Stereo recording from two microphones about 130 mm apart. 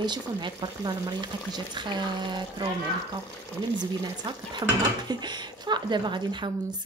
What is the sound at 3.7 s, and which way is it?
Speech, 35° right (ahead or behind).